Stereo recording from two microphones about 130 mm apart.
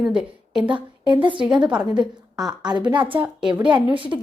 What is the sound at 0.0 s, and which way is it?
Speech, 5° right (ahead or behind).